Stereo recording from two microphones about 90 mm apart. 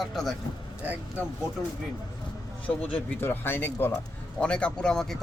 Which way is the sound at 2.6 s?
20° left (ahead or behind).